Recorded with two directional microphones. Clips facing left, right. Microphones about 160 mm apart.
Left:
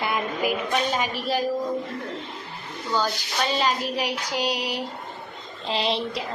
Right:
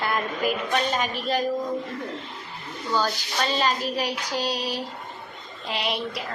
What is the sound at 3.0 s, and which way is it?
A woman's voice, 15° left (ahead or behind).